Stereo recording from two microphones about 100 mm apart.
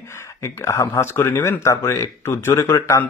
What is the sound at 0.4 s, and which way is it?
Speech, 30° left (ahead or behind).